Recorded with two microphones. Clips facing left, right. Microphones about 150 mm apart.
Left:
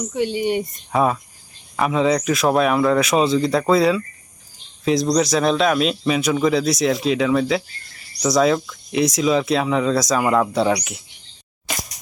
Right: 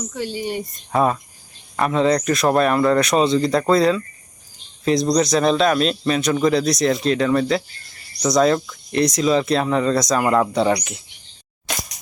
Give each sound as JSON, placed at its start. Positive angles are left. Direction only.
{"t": 0.0, "sound": "speech", "side_deg": 20}
{"t": 0.9, "sound": "speech", "side_deg": 0}